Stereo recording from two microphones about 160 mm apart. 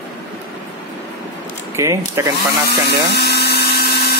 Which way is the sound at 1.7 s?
20° right (ahead or behind).